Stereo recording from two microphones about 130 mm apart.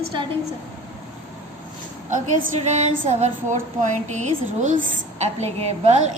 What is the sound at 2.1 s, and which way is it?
A woman's voice, 70° right (ahead or behind).